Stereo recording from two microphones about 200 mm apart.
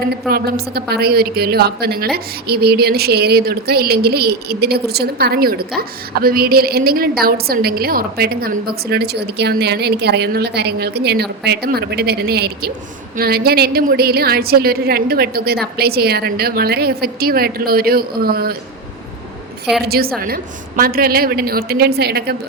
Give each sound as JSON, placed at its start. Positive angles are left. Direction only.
{"t": 0.1, "sound": "a woman's voice", "side_deg": -50}
{"t": 19.8, "sound": "a woman's voice", "side_deg": -50}